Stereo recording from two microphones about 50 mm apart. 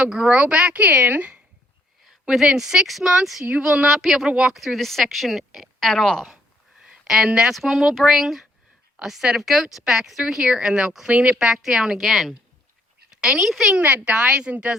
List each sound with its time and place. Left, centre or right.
0.0 s speech: centre
0.3 s speech: right
2.0 s speech: centre
3.8 s a woman's voice: centre
5.9 s speech: centre
6.8 s a sound: centre
7.3 s speech: centre
7.5 s a woman's voice: centre; by 11.3 s right
11.3 s a woman's voice: centre
13.7 s speech: right